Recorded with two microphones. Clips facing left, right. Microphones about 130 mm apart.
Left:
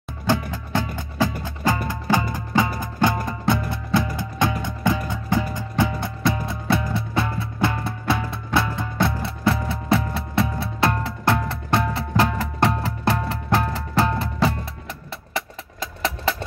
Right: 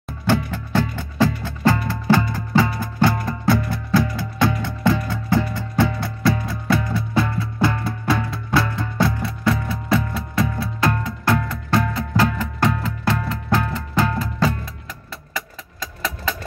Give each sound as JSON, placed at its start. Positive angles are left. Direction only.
{"t": 0.3, "sound": "music", "side_deg": 15}